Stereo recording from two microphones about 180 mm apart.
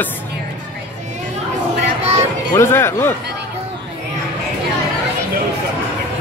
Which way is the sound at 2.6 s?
15° left (ahead or behind).